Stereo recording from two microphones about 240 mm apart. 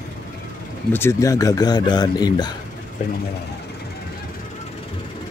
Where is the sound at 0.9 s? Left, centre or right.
Centre.